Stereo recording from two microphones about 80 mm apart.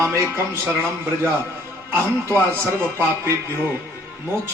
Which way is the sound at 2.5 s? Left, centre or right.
Right.